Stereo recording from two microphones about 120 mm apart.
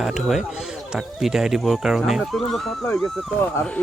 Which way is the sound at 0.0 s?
Centre (ahead or behind).